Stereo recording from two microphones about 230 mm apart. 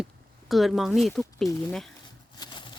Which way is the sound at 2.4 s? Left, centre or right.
Centre.